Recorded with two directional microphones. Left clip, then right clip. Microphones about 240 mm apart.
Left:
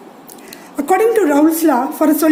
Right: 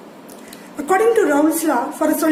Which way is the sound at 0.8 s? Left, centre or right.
Left.